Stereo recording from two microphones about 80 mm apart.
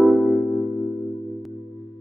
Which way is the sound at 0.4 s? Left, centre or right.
Centre.